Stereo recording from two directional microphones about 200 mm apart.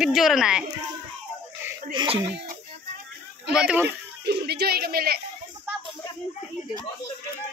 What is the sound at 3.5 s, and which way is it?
Speech, 5° right (ahead or behind).